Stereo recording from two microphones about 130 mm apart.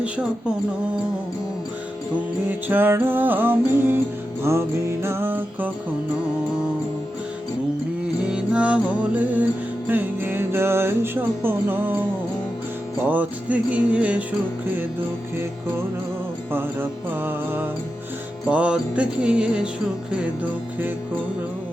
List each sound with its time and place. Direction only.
0.0 s music: 10° right (ahead or behind)
2.5 s music: 15° right (ahead or behind)
8.3 s music: 10° right (ahead or behind)
13.1 s music: 10° right (ahead or behind)
17.2 s music: 15° right (ahead or behind)